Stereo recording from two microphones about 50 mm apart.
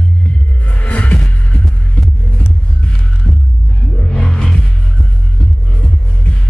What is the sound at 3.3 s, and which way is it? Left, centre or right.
Throbbing, left.